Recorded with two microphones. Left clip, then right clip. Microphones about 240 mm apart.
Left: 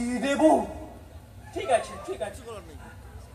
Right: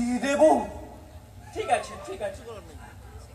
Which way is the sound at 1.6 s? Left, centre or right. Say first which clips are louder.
Left 1 dB; right.